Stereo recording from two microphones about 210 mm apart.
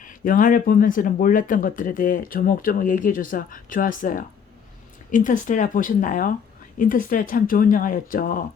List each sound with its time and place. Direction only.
0.0 s speech: 40° left (ahead or behind)